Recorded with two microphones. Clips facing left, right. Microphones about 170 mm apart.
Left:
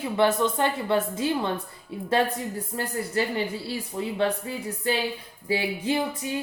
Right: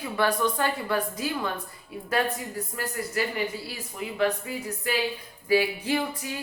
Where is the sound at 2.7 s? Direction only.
30° left (ahead or behind).